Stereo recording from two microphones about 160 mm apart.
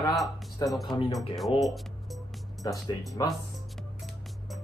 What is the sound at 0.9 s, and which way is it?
Speech, 25° left (ahead or behind).